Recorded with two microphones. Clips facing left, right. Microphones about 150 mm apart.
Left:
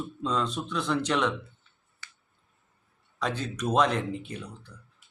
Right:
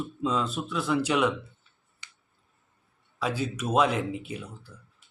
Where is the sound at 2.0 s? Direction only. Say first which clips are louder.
Left 2 dB; 15° right (ahead or behind).